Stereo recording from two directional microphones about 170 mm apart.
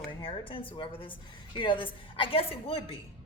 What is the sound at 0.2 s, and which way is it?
A woman's voice, 30° left (ahead or behind).